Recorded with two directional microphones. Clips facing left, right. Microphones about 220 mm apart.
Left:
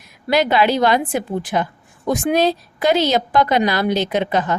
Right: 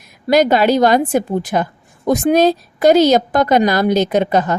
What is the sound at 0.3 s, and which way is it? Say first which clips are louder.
A woman's voice: right 4 dB; 45° right (ahead or behind).